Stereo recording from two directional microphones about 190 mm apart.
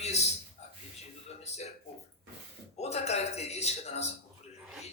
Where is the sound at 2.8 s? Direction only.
35° left (ahead or behind).